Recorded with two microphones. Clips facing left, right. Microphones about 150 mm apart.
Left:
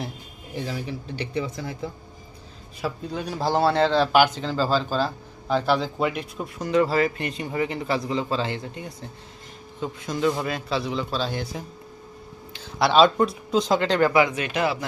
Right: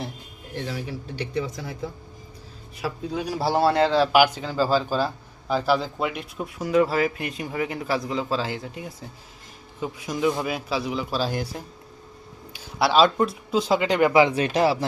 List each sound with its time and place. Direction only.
0.5 s a man's voice: centre (ahead or behind)
14.1 s speech: 25° right (ahead or behind)